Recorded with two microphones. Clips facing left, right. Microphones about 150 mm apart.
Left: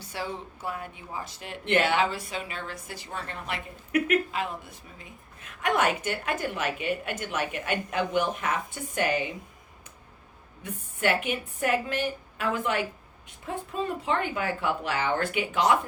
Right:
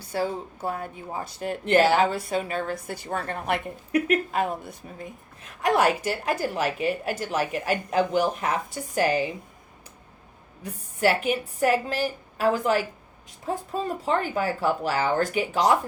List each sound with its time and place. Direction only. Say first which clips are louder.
0.1 s speech: right 7 dB; 40° right (ahead or behind)
5.4 s a woman's voice: right 4 dB; 35° right (ahead or behind)
10.6 s a woman's voice: right 5 dB; 35° right (ahead or behind)